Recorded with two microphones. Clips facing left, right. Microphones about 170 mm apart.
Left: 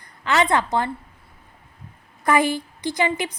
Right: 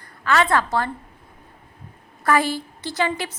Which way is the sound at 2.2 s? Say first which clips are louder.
Left 1 dB; 15° left (ahead or behind).